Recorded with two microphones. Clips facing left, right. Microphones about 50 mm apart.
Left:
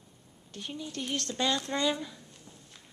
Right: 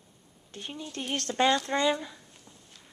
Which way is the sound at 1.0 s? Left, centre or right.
Right.